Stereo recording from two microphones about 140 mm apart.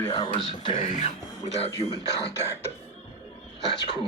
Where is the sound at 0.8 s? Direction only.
50° left (ahead or behind).